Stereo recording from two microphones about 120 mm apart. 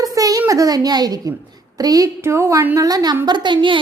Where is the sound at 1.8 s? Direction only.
30° right (ahead or behind).